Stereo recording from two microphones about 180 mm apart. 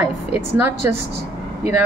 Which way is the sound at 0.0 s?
10° right (ahead or behind).